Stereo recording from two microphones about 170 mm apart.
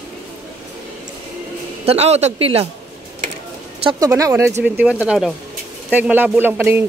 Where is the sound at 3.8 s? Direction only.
20° right (ahead or behind).